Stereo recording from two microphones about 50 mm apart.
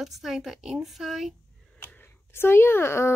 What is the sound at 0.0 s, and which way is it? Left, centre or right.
Speech, centre.